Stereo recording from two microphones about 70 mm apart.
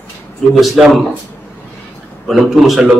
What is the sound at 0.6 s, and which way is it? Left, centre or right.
Speech, centre.